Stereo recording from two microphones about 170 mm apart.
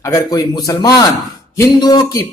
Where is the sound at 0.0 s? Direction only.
20° left (ahead or behind).